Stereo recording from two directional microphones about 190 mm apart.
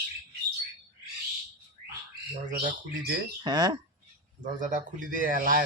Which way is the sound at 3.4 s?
20° right (ahead or behind).